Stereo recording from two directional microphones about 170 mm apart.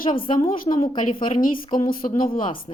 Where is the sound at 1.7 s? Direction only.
55° left (ahead or behind).